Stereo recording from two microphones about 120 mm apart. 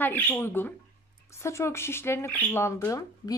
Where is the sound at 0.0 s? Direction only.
15° left (ahead or behind).